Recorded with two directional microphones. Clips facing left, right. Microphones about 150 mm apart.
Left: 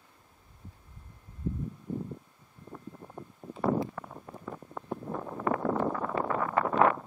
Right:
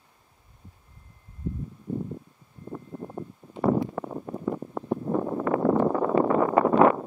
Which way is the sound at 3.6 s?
35° right (ahead or behind).